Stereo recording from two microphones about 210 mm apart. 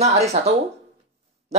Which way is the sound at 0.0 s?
30° right (ahead or behind).